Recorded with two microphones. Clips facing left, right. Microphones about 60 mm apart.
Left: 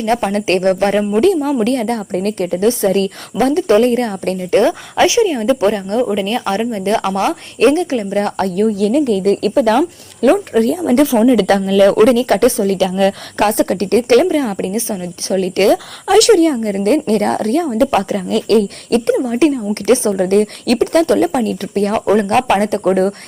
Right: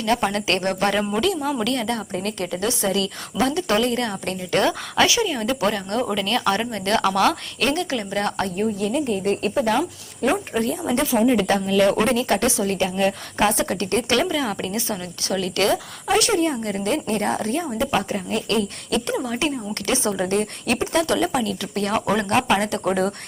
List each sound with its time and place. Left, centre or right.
0.0 s a woman's voice: left
8.7 s speech: left
11.2 s speech: left
12.0 s a woman's voice: left
14.3 s a woman's voice: left
15.7 s speech: left
16.6 s speech: left
17.7 s speech: left
19.1 s a woman's voice: left
21.0 s a woman's voice: left